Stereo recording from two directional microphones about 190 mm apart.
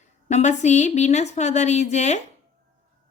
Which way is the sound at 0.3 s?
35° left (ahead or behind).